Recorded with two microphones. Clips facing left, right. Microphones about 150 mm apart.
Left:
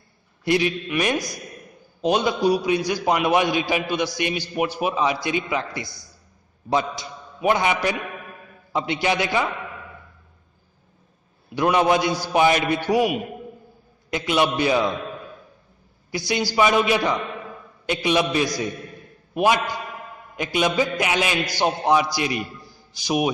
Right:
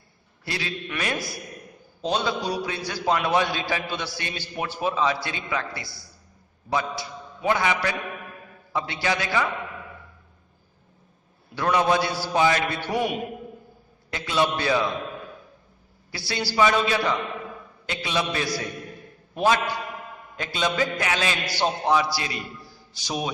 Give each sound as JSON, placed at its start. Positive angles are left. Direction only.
{"t": 0.4, "sound": "a man's voice", "side_deg": 20}
{"t": 11.5, "sound": "a man's voice", "side_deg": 15}
{"t": 16.1, "sound": "a man's voice", "side_deg": 15}